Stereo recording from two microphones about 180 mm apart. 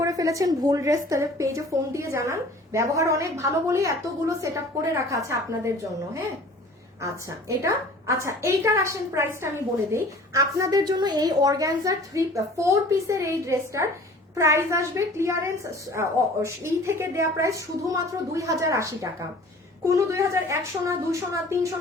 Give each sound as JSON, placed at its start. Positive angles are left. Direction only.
{"t": 0.0, "sound": "a woman's voice", "side_deg": -20}
{"t": 7.0, "sound": "a woman's voice", "side_deg": -15}